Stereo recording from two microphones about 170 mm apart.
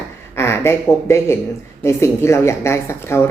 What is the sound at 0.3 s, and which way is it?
A woman's voice, 15° left (ahead or behind).